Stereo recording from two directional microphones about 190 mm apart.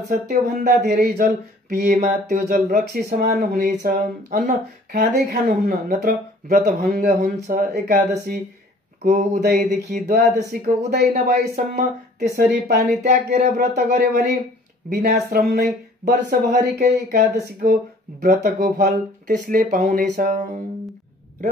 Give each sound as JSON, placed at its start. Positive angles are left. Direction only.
{"t": 0.1, "sound": "speech", "side_deg": -50}
{"t": 7.5, "sound": "speech", "side_deg": -50}
{"t": 9.0, "sound": "speech", "side_deg": -45}